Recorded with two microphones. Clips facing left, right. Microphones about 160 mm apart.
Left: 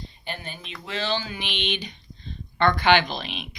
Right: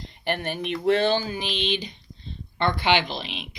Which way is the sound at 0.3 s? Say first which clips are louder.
Right 10 dB; 70° right (ahead or behind).